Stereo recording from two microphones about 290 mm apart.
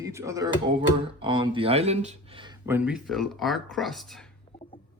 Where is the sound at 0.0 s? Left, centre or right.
Centre.